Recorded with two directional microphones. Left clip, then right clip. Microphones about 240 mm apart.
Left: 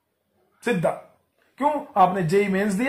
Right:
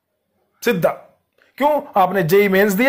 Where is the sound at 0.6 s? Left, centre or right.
Right.